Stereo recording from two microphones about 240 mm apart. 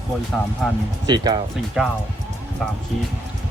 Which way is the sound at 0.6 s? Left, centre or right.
Centre.